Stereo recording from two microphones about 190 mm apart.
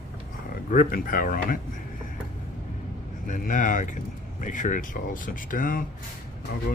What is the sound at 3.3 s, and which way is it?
Speech, 45° left (ahead or behind).